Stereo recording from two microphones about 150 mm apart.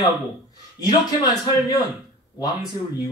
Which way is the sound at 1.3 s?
25° left (ahead or behind).